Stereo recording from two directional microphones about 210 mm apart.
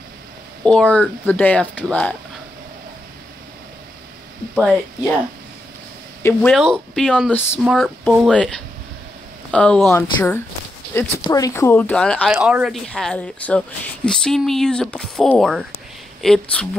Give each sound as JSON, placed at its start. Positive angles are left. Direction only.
{"t": 0.7, "sound": "speech", "side_deg": 5}
{"t": 4.6, "sound": "speech", "side_deg": 0}
{"t": 6.2, "sound": "speech", "side_deg": 5}